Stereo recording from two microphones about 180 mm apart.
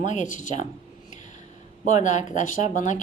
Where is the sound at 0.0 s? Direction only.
45° left (ahead or behind).